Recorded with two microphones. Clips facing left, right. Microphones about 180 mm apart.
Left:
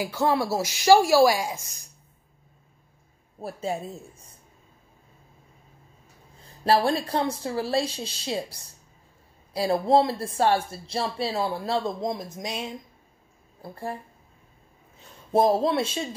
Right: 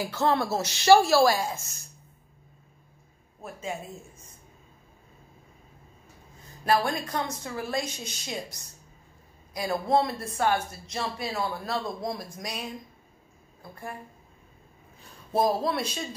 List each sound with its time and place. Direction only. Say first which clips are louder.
0.0 s a woman's voice: left 2 dB; 10° left (ahead or behind)
3.3 s speech: left 5 dB; 35° left (ahead or behind)
6.6 s a woman's voice: left 4 dB; 30° left (ahead or behind)
15.0 s speech: left 4 dB; 25° left (ahead or behind)